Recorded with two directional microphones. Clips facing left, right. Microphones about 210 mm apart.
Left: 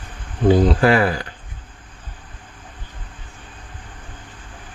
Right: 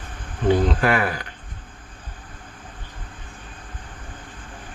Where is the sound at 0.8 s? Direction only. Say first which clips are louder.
Left 5 dB; 30° left (ahead or behind).